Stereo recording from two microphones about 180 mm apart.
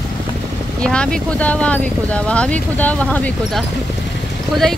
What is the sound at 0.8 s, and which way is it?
Speech, 5° left (ahead or behind).